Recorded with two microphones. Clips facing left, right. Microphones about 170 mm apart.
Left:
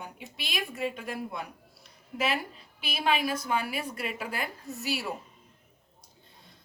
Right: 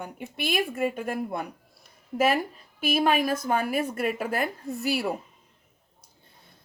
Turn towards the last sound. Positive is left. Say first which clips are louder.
# right 6 dB
turn(degrees=-60)  # may be behind; listen again after turning